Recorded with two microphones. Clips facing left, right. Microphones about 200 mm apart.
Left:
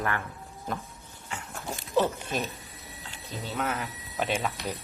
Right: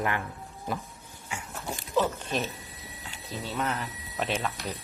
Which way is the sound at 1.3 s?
10° right (ahead or behind).